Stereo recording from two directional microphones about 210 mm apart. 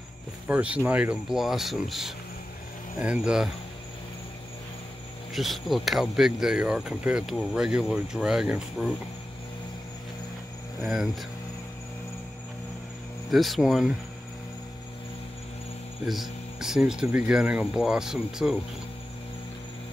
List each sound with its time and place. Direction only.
0.5 s speech: 5° right (ahead or behind)
5.3 s speech: centre (ahead or behind)
10.8 s speech: centre (ahead or behind)
13.3 s speech: centre (ahead or behind)
16.1 s speech: centre (ahead or behind)